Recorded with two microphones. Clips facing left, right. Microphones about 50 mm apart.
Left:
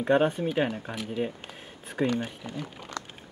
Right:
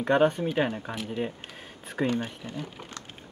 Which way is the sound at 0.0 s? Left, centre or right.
Centre.